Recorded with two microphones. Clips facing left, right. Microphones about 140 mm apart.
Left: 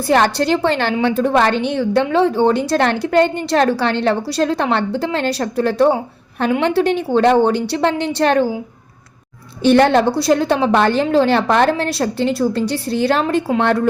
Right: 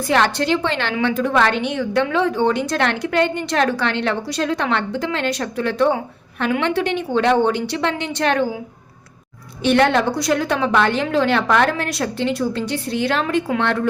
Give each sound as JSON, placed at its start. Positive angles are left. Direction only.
{"t": 0.1, "sound": "a woman's voice", "side_deg": 40}
{"t": 9.6, "sound": "a woman's voice", "side_deg": 35}